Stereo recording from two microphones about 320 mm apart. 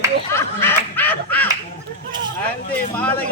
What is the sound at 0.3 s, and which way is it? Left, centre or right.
Snicker, centre.